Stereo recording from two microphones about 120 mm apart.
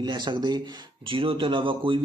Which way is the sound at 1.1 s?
45° right (ahead or behind).